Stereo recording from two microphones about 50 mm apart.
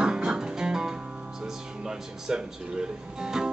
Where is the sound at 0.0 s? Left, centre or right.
Centre.